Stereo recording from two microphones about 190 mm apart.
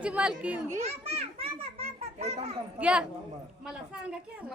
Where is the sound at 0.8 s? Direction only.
35° right (ahead or behind).